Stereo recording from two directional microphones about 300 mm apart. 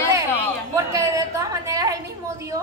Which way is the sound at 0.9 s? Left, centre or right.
Centre.